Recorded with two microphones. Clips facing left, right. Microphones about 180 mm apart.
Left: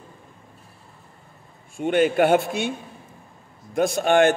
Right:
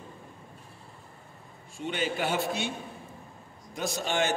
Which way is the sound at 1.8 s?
55° left (ahead or behind).